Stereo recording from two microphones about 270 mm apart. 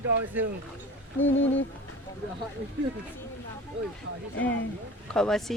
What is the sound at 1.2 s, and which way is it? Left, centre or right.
Speech, left.